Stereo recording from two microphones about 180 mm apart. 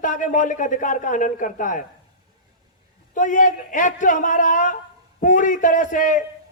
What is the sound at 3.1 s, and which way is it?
Speech, 45° left (ahead or behind).